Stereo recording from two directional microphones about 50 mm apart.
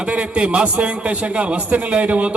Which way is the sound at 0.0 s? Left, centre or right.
Right.